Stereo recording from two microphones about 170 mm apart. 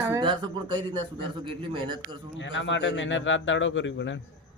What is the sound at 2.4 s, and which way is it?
Speech, 90° left.